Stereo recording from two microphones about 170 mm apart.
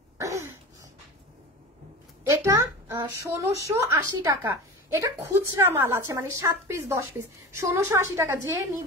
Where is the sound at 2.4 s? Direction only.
15° right (ahead or behind).